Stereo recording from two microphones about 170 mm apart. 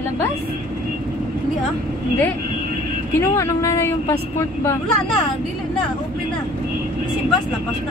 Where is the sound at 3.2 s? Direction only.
15° left (ahead or behind).